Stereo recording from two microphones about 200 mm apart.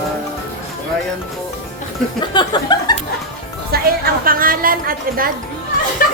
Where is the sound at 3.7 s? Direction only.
50° right (ahead or behind).